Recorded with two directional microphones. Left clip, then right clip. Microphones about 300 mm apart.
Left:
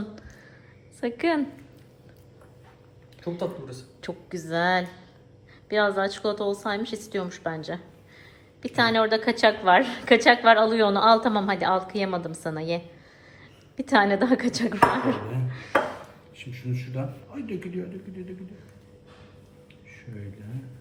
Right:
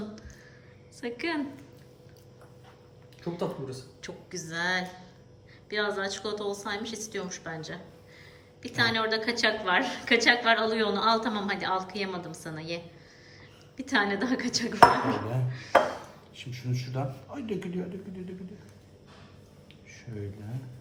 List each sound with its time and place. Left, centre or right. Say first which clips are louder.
1.0 s a woman's voice: left 7 dB; centre
3.3 s a man's voice: left 1 dB; right
4.0 s a woman's voice: left 6 dB; centre
16.7 s a woman's voice: even; centre